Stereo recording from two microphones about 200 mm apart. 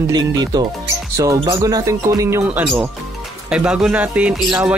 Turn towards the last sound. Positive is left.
turn(degrees=-5)  # may be behind; listen again after turning